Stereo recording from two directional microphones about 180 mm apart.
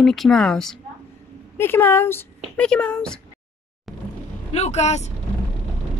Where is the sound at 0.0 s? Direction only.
Centre (ahead or behind).